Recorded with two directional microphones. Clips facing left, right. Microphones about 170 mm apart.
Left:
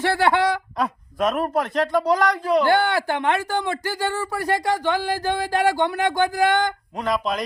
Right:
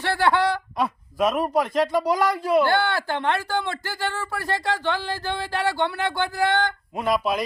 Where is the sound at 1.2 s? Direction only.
Centre (ahead or behind).